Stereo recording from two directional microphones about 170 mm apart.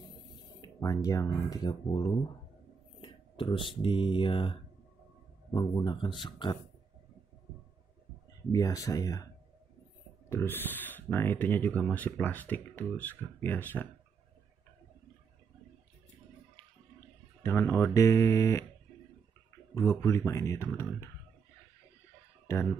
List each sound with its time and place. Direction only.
0.6 s speech: 20° left (ahead or behind)
8.5 s speech: 20° left (ahead or behind)
10.3 s speech: 10° left (ahead or behind)
17.4 s speech: 15° left (ahead or behind)
19.7 s speech: 15° left (ahead or behind)